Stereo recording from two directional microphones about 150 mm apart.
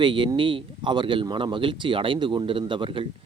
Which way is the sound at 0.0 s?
30° right (ahead or behind).